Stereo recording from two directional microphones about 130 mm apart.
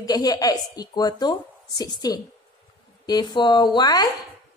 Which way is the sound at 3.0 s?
35° left (ahead or behind).